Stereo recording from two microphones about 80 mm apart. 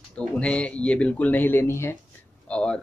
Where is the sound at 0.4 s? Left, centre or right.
Centre; by 2.0 s left.